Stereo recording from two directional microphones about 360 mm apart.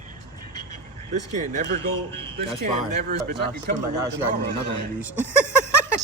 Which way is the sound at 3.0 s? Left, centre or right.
Right.